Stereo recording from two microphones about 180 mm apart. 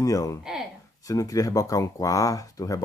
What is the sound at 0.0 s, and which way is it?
Speech, 20° left (ahead or behind).